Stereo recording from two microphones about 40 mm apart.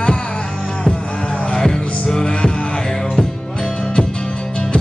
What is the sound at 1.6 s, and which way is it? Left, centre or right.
Music, centre.